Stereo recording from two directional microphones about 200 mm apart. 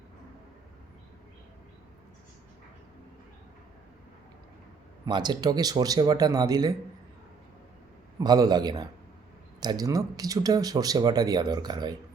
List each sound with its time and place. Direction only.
5.0 s speech: 20° right (ahead or behind)
8.2 s speech: 20° right (ahead or behind)